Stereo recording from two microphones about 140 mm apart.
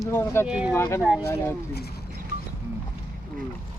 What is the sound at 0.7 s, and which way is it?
Speech, 20° left (ahead or behind).